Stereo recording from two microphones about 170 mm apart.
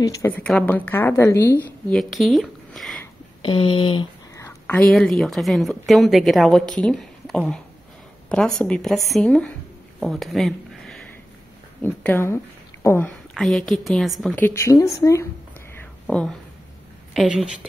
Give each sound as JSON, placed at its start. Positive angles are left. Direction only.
{"t": 0.0, "sound": "a woman's voice", "side_deg": 20}
{"t": 0.3, "sound": "a woman's voice", "side_deg": 5}
{"t": 1.9, "sound": "speech", "side_deg": 0}
{"t": 3.4, "sound": "a sound", "side_deg": 30}
{"t": 4.7, "sound": "a woman's voice", "side_deg": 5}
{"t": 9.9, "sound": "a sound", "side_deg": 0}
{"t": 11.8, "sound": "a woman's voice", "side_deg": 10}
{"t": 13.3, "sound": "a woman's voice", "side_deg": 5}
{"t": 14.4, "sound": "a woman's voice", "side_deg": 15}
{"t": 15.7, "sound": "a sound", "side_deg": 10}
{"t": 17.1, "sound": "a woman's voice", "side_deg": 0}